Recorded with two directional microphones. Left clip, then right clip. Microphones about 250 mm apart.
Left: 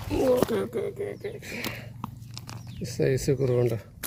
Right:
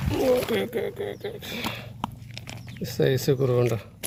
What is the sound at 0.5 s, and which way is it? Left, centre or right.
Speech, centre.